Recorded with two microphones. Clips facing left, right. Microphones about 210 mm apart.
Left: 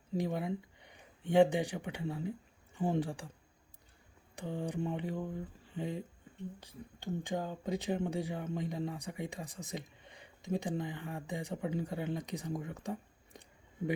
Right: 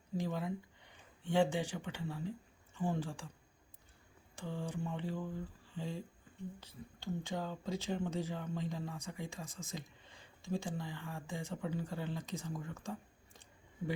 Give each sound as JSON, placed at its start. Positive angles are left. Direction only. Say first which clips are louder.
{"t": 0.2, "sound": "speech", "louder": "left 3 dB", "side_deg": 15}
{"t": 4.4, "sound": "speech", "louder": "left 4 dB", "side_deg": 15}